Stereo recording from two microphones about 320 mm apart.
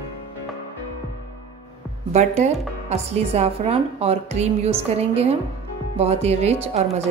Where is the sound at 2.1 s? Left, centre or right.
Right.